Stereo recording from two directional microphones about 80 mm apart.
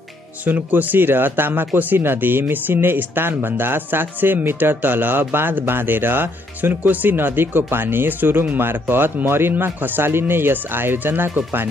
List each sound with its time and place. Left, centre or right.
0.5 s speech: right